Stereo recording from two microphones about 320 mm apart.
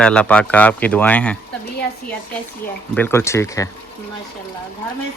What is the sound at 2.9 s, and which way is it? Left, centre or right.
Speech, centre.